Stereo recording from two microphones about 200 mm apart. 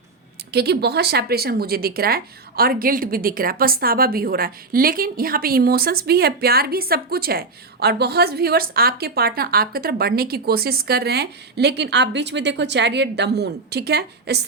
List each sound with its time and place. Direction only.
0.5 s speech: 55° right (ahead or behind)